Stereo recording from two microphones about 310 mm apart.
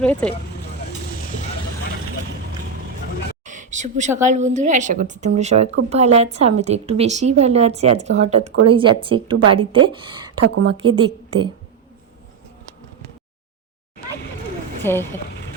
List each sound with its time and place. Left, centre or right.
0.0 s speech: centre
0.9 s vehicle: left
3.4 s a woman's voice: right
10.4 s a woman's voice: right
10.7 s a woman's voice: centre
14.8 s speech: centre